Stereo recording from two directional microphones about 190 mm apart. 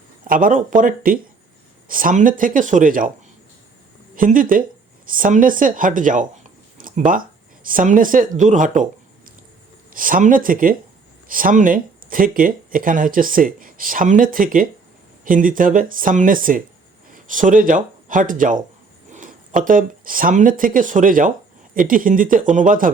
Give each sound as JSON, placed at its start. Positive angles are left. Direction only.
{"t": 0.3, "sound": "speech", "side_deg": -45}
{"t": 4.1, "sound": "speech", "side_deg": -45}
{"t": 19.1, "sound": "a sound", "side_deg": -40}
{"t": 19.6, "sound": "speech", "side_deg": -45}